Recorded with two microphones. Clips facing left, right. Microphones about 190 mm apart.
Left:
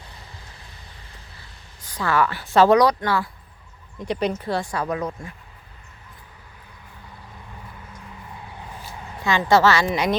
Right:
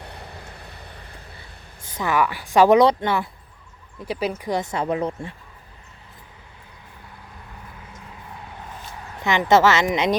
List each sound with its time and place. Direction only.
0.0 s vehicle: 65° right (ahead or behind)
1.8 s a woman's voice: 20° right (ahead or behind)
4.0 s a woman's voice: 5° right (ahead or behind); by 5.3 s 30° right (ahead or behind)
9.2 s a woman's voice: 20° right (ahead or behind)